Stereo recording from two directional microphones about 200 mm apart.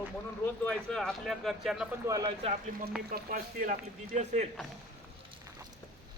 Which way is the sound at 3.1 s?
45° right (ahead or behind).